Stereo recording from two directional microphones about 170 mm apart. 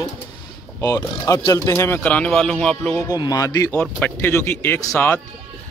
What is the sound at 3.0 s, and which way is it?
Speech, 20° left (ahead or behind).